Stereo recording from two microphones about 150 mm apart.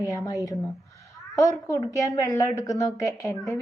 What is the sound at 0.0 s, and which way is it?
A woman's voice, 20° left (ahead or behind).